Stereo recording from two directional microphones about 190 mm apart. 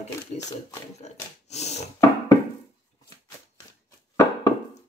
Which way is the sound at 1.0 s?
35° left (ahead or behind).